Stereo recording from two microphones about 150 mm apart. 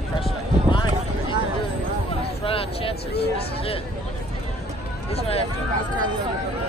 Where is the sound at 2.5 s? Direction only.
40° left (ahead or behind).